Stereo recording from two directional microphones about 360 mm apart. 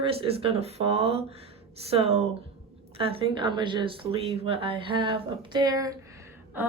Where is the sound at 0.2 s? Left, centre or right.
Centre.